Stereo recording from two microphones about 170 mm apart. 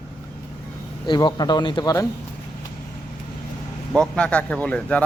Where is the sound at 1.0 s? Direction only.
25° left (ahead or behind).